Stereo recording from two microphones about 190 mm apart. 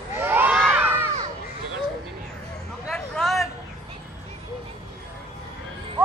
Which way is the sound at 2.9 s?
Centre (ahead or behind).